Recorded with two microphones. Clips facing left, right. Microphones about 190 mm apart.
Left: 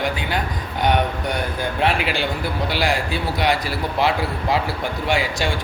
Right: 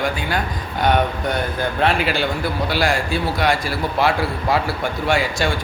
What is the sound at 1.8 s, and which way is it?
A man's voice, 15° left (ahead or behind).